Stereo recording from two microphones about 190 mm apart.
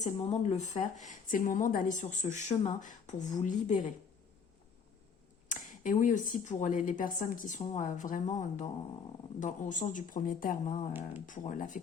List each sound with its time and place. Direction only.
0.0 s speech: 35° left (ahead or behind)
5.5 s speech: 40° left (ahead or behind)